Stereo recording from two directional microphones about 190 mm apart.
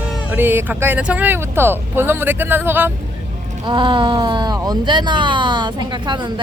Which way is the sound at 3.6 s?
25° right (ahead or behind).